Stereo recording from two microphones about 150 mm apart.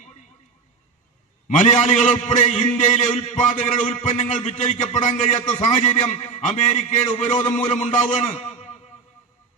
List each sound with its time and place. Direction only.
1.5 s a man's voice: 50° left (ahead or behind)